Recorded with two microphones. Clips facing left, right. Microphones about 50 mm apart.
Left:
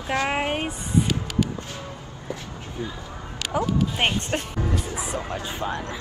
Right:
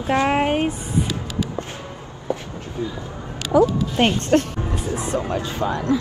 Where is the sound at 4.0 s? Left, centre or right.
Centre.